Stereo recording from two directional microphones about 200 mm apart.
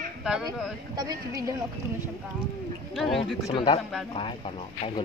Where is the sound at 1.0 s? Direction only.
20° right (ahead or behind).